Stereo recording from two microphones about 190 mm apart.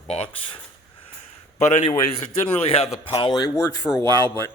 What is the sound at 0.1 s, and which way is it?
Speech, 35° left (ahead or behind).